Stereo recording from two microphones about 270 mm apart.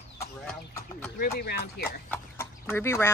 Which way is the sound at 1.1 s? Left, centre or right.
Left.